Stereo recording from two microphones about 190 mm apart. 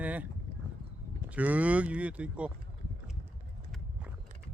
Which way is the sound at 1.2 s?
10° right (ahead or behind).